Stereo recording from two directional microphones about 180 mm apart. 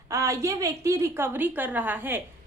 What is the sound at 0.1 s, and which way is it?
Speech, 15° right (ahead or behind).